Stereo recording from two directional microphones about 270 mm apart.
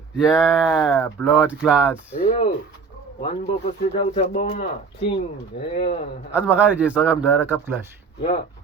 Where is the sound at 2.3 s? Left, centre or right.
Left.